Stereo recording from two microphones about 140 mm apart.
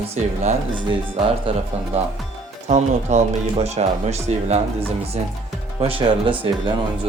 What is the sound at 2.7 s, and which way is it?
Speech, 55° right (ahead or behind).